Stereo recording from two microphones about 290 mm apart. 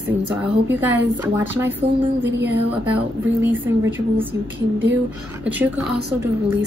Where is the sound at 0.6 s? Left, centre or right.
Centre.